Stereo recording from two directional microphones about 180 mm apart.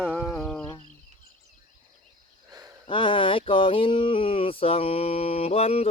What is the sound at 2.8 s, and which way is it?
Speech, 30° left (ahead or behind).